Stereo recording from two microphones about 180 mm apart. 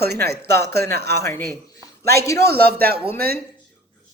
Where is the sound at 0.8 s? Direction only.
15° left (ahead or behind).